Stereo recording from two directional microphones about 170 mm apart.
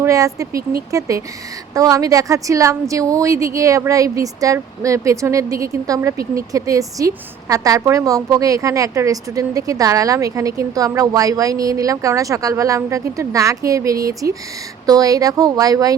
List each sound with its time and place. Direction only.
0.0 s a woman's voice: 20° right (ahead or behind)